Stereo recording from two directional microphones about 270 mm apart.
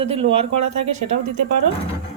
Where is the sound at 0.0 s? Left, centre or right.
Right.